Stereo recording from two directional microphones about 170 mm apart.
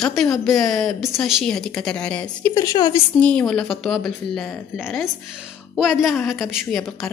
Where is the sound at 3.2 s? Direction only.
5° left (ahead or behind).